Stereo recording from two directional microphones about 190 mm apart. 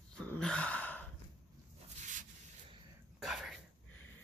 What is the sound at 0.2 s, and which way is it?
Gasp, 5° left (ahead or behind).